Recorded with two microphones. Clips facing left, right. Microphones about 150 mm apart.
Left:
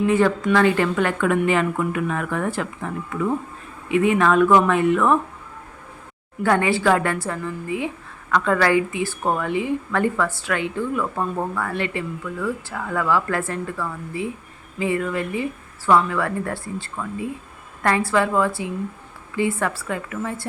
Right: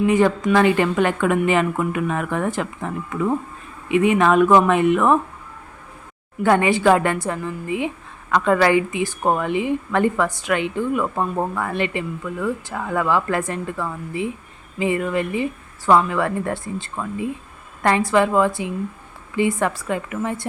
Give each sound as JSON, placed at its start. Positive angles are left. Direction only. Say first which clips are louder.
{"t": 0.1, "sound": "a woman's voice", "louder": "right 1 dB", "side_deg": -15}
{"t": 6.4, "sound": "a woman's voice", "louder": "right 3 dB", "side_deg": -20}